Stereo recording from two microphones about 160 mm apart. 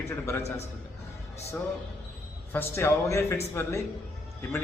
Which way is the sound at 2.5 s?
15° left (ahead or behind).